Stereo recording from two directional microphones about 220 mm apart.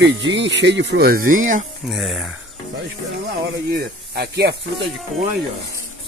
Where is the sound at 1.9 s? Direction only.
Centre (ahead or behind).